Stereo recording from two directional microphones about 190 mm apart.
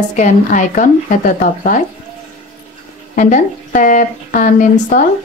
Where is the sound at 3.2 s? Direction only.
45° left (ahead or behind).